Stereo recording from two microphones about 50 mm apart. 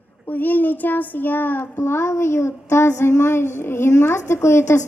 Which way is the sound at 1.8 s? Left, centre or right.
Left.